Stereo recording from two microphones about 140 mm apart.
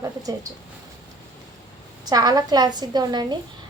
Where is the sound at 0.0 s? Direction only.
25° right (ahead or behind).